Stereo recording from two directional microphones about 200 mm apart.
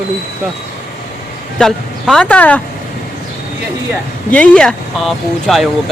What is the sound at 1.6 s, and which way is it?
Speech, centre (ahead or behind).